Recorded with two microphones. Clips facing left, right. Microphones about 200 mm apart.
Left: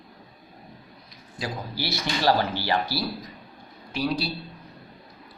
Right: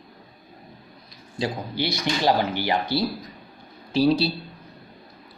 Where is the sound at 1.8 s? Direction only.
15° right (ahead or behind).